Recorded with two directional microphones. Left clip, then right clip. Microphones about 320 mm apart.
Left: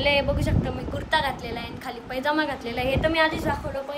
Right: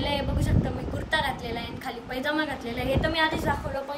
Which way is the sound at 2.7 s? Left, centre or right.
Left.